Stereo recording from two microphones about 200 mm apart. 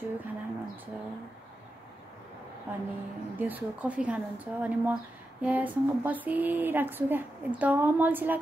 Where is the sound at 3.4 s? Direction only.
5° right (ahead or behind).